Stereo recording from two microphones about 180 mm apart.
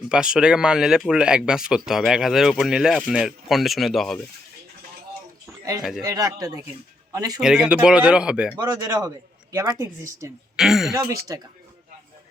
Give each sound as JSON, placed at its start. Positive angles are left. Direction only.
{"t": 0.1, "sound": "speech", "side_deg": -5}
{"t": 6.0, "sound": "a man's voice", "side_deg": -20}
{"t": 7.3, "sound": "speech", "side_deg": -5}
{"t": 8.5, "sound": "speech", "side_deg": -15}
{"t": 10.6, "sound": "speech", "side_deg": 0}
{"t": 10.9, "sound": "a man's voice", "side_deg": -20}